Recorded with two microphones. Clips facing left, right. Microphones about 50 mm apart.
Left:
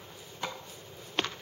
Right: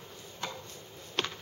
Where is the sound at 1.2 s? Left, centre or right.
Centre.